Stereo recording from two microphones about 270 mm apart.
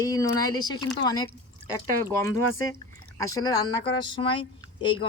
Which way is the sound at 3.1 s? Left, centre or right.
Centre.